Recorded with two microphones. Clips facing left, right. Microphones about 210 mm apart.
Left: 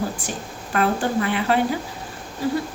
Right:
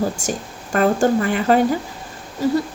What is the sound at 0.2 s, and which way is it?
A woman's voice, 45° right (ahead or behind).